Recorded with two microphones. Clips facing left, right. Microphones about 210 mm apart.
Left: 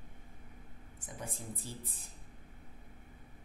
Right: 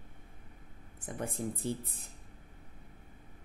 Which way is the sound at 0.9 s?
60° right (ahead or behind).